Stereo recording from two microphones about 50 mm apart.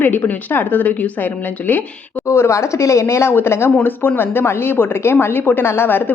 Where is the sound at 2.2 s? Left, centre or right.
Left.